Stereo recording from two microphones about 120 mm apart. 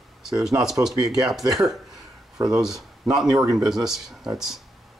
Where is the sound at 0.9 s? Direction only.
30° right (ahead or behind).